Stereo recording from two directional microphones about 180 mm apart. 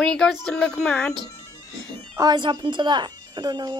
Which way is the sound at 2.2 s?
25° right (ahead or behind).